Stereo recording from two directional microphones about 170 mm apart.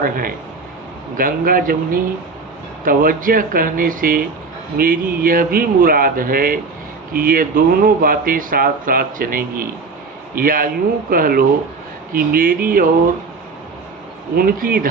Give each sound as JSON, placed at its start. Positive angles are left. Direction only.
{"t": 0.0, "sound": "speech", "side_deg": -55}
{"t": 14.3, "sound": "speech", "side_deg": -60}